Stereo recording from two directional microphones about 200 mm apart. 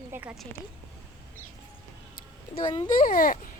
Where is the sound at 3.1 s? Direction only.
45° left (ahead or behind).